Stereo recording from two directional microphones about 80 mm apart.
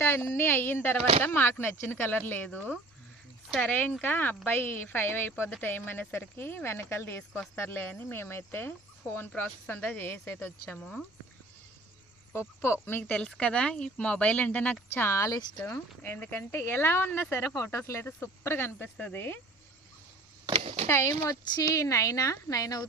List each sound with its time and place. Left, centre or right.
0.0 s speech: left
10.8 s speech: centre
12.3 s speech: left
13.1 s speech: centre
15.0 s speech: left
20.8 s speech: left
21.5 s a woman's voice: left